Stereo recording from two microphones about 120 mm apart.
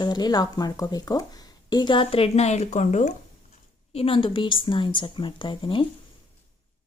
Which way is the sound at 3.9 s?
50° left (ahead or behind).